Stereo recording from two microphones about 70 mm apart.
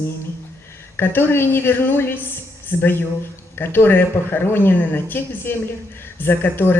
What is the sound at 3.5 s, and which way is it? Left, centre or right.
Speech, left.